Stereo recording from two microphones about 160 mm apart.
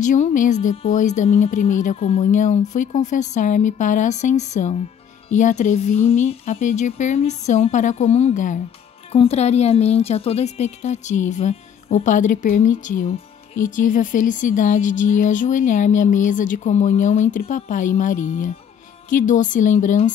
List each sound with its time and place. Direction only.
0.0 s a woman's voice: 50° left (ahead or behind)